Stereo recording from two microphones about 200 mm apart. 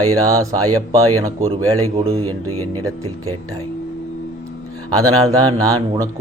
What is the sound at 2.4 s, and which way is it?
Speech, 90° right.